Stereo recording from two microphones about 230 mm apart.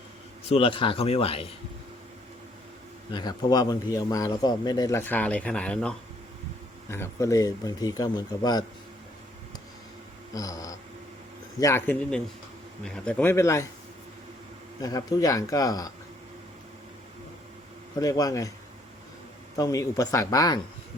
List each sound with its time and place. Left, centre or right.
0.4 s a man's voice: left
3.1 s a man's voice: centre
10.3 s a man's voice: centre
14.8 s a man's voice: centre
18.0 s a man's voice: centre
19.5 s a man's voice: centre